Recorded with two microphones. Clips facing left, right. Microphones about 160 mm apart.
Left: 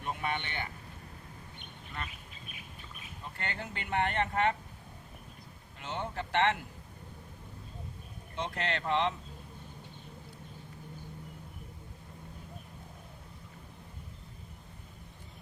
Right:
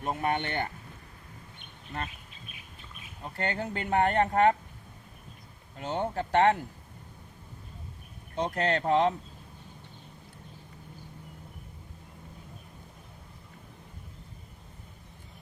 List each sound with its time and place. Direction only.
0.0 s speech: 45° right (ahead or behind)
3.3 s speech: 40° right (ahead or behind)
5.8 s speech: 40° right (ahead or behind)
8.4 s speech: 40° right (ahead or behind)